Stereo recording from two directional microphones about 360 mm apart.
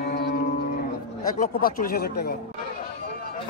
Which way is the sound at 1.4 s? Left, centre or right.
Left.